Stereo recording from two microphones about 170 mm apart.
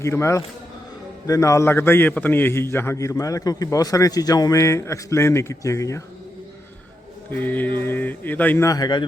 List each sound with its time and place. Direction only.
0.0 s a man's voice: 15° left (ahead or behind)
7.3 s a man's voice: 10° left (ahead or behind)